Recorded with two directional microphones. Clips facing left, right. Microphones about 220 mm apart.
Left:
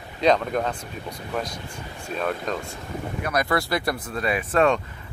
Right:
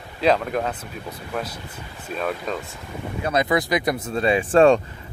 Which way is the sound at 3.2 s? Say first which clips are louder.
Right 4 dB; 20° right (ahead or behind).